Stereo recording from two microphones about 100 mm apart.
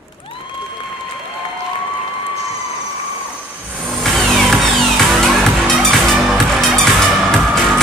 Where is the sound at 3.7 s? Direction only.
5° left (ahead or behind).